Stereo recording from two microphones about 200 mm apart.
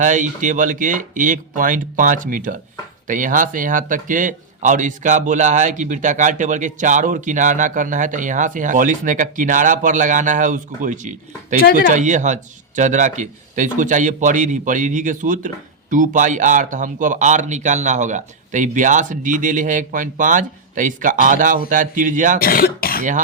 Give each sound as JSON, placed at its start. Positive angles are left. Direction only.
{"t": 0.0, "sound": "speech", "side_deg": -40}
{"t": 22.4, "sound": "speech", "side_deg": 45}